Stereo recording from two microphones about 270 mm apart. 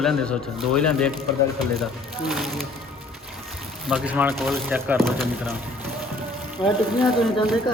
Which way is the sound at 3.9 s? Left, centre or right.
Centre.